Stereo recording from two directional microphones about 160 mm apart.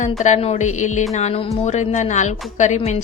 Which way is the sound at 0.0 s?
45° left (ahead or behind).